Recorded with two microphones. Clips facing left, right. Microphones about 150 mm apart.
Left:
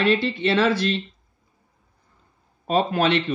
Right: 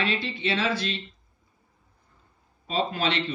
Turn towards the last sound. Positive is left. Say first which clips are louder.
# left 7 dB
turn(degrees=55)  # may be behind; listen again after turning